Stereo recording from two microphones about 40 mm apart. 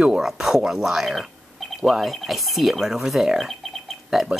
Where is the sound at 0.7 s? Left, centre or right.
Centre.